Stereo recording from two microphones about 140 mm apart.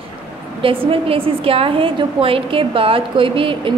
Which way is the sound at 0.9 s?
40° right (ahead or behind).